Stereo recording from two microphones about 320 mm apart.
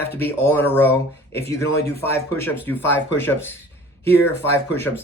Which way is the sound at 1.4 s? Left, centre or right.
Left.